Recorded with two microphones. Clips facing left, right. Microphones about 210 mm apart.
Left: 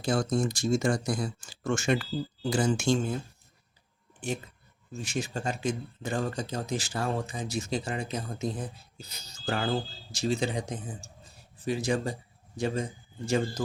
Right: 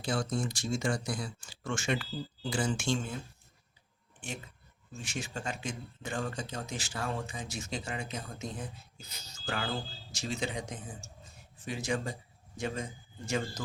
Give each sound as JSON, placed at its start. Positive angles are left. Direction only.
{"t": 0.0, "sound": "speech", "side_deg": 40}
{"t": 4.2, "sound": "a man's voice", "side_deg": 35}